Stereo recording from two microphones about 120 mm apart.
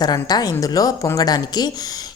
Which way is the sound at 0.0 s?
35° left (ahead or behind).